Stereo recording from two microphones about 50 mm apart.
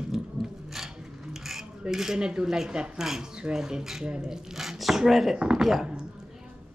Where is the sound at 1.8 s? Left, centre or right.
Centre.